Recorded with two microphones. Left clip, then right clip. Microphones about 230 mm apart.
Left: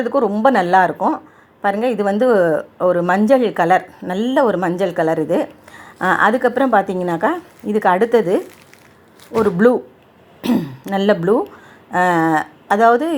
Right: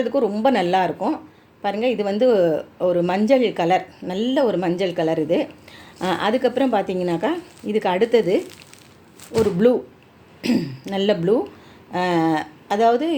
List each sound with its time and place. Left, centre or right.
0.0 s a woman's voice: centre